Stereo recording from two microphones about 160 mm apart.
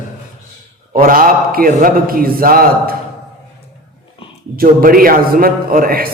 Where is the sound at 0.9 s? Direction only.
65° right (ahead or behind).